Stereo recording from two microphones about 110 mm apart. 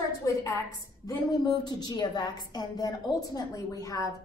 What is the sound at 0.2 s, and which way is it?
Speech, 30° left (ahead or behind).